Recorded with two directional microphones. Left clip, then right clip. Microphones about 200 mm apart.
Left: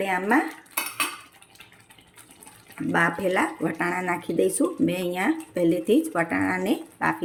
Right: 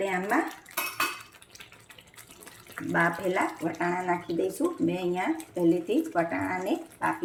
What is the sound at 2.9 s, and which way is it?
Speech, 50° left (ahead or behind).